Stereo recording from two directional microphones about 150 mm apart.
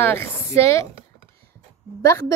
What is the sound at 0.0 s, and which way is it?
Speech, 15° left (ahead or behind).